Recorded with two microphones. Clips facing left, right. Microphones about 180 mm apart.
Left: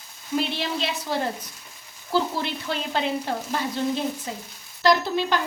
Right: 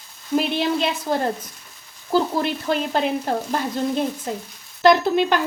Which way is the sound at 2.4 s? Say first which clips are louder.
Right 6 dB; 45° right (ahead or behind).